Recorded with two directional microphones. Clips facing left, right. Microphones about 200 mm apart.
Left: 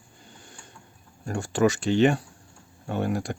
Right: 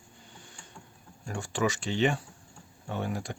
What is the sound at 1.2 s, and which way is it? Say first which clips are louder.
Speech: left 7 dB; 45° left (ahead or behind).